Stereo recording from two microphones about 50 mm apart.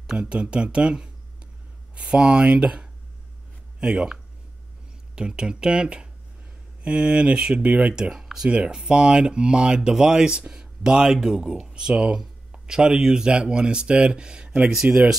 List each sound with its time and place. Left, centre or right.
0.0 s speech: centre
14.8 s speech: right